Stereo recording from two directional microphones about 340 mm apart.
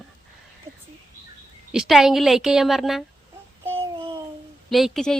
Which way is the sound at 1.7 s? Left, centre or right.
Centre.